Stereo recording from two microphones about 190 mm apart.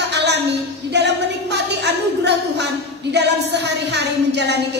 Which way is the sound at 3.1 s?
65° right (ahead or behind).